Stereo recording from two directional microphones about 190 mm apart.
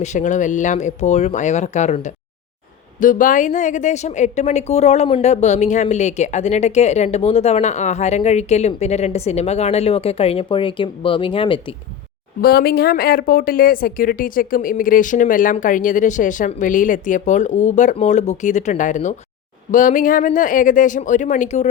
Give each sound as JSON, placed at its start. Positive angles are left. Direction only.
{"t": 0.0, "sound": "a woman's voice", "side_deg": 40}
{"t": 12.4, "sound": "a woman's voice", "side_deg": 55}